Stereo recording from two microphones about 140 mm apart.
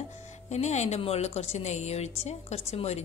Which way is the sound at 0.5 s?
55° left (ahead or behind).